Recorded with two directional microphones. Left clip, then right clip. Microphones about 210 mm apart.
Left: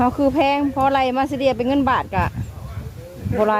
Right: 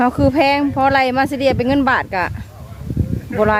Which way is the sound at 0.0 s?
20° right (ahead or behind).